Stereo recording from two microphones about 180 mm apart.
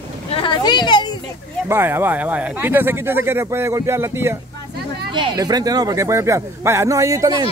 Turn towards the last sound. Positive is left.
turn(degrees=-20)  # may be behind; listen again after turning